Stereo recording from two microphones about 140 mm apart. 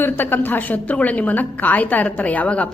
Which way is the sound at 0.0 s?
15° left (ahead or behind).